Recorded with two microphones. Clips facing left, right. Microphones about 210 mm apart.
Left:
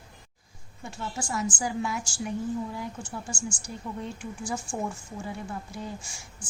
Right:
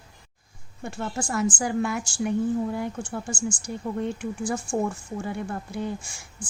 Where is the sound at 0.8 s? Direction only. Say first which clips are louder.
Right 5 dB; 55° right (ahead or behind).